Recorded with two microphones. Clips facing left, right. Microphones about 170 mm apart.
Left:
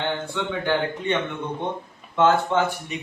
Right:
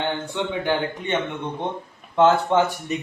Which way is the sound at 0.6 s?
15° right (ahead or behind).